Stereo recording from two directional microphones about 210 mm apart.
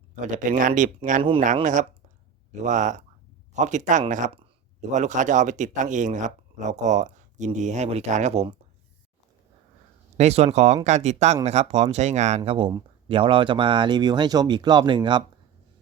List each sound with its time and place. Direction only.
0.2 s speech: 35° right (ahead or behind)
10.2 s speech: 30° right (ahead or behind)